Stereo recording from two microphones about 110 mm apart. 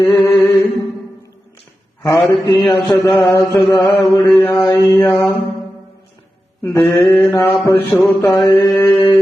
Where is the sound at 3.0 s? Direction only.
Centre (ahead or behind).